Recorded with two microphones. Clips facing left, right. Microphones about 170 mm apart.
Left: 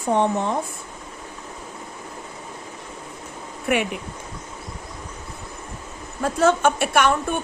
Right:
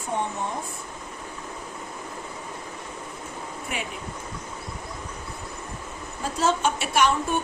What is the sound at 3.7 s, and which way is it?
Speech, 65° left (ahead or behind).